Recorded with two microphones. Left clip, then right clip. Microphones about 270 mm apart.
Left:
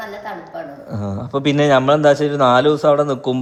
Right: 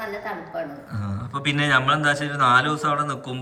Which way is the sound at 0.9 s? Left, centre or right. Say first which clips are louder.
Left 12 dB; centre.